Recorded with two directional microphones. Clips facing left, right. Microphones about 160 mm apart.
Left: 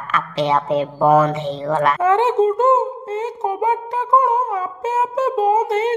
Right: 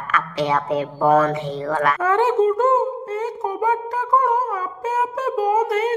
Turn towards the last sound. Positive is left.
turn(degrees=25)  # may be behind; listen again after turning